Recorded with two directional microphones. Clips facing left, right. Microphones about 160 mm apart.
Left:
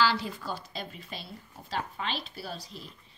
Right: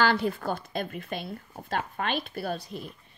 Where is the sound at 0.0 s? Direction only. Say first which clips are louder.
Right 3 dB; 55° right (ahead or behind).